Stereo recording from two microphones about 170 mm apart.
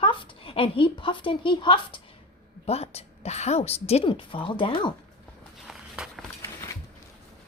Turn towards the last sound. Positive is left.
turn(degrees=-5)  # may be behind; listen again after turning